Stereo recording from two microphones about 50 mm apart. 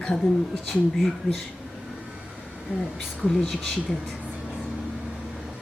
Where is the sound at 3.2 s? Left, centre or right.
Centre.